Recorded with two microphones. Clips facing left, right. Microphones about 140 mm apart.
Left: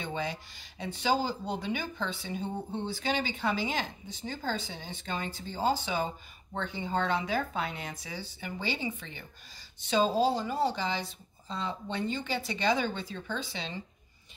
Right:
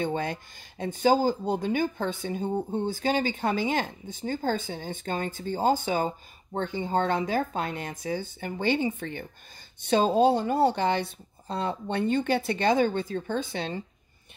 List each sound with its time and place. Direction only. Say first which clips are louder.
0.0 s speech: right 6 dB; 55° right (ahead or behind)